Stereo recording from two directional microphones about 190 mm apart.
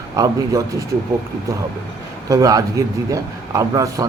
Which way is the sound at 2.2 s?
15° right (ahead or behind).